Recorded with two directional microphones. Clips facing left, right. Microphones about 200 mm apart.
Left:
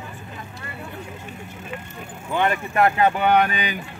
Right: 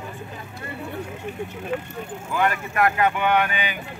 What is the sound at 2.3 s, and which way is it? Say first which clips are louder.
Speech: left 2 dB; 25° left (ahead or behind).